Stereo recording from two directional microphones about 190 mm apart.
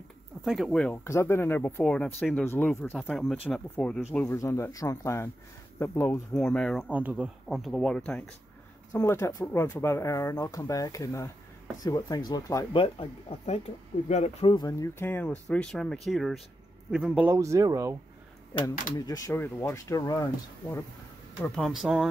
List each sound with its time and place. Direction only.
0.5 s speech: centre (ahead or behind)
1.0 s speech: 15° left (ahead or behind)
8.9 s speech: 15° left (ahead or behind)
12.8 s speech: 30° left (ahead or behind); by 17.9 s 15° right (ahead or behind)
18.9 s speech: 20° left (ahead or behind)
21.4 s speech: centre (ahead or behind)